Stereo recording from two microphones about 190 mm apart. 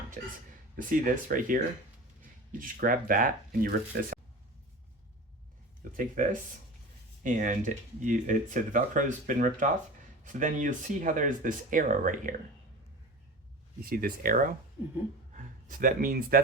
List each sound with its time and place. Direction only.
0.2 s speech: 45° right (ahead or behind)
5.8 s speech: 45° right (ahead or behind)
7.2 s speech: 45° right (ahead or behind)
13.9 s speech: 50° right (ahead or behind)